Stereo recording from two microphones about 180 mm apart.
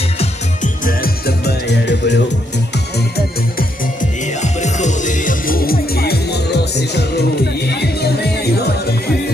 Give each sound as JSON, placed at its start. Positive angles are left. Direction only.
{"t": 0.2, "sound": "music", "side_deg": 45}